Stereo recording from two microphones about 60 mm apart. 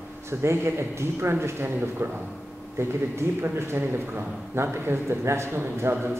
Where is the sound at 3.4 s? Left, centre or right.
Right.